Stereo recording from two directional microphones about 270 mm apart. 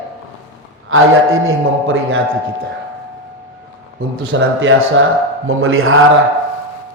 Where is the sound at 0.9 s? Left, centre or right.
Right.